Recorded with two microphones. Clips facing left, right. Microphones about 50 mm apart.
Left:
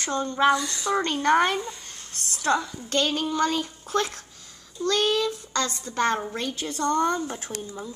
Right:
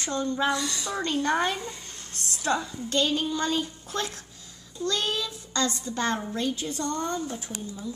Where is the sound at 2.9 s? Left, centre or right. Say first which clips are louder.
Left 1 dB; left.